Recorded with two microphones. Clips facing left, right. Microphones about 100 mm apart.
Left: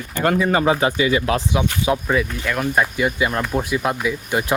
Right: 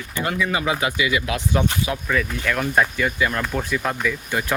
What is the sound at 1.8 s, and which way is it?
Speech, 25° left (ahead or behind).